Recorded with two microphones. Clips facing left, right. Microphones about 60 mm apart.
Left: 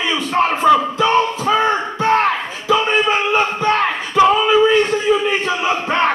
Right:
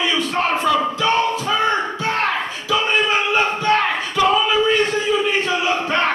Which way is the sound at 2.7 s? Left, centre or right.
Left.